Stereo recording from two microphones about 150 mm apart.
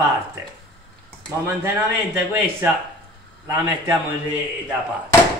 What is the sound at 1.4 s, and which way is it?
A man's voice, 15° right (ahead or behind).